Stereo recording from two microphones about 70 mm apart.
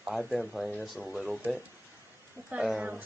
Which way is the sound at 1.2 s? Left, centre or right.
Centre.